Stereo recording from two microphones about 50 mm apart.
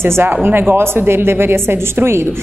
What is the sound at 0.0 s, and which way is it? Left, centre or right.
Speech, right.